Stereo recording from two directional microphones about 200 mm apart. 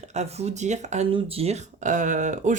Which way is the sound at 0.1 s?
35° right (ahead or behind).